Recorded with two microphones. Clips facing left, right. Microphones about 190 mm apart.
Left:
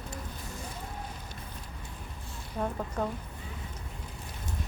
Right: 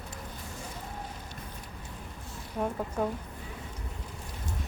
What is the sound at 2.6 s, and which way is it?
Speech, centre (ahead or behind).